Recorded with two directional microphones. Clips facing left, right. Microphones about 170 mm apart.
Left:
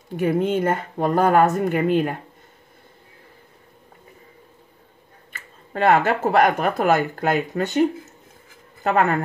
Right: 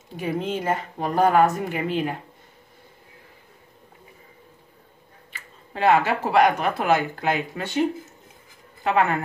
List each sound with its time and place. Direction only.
0.1 s speech: 55° left (ahead or behind)
5.3 s speech: 50° left (ahead or behind)
8.8 s speech: 45° left (ahead or behind)